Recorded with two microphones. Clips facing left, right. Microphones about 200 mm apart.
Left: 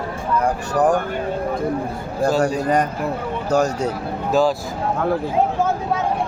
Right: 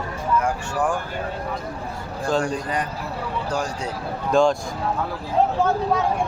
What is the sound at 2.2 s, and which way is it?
Speech, 40° left (ahead or behind).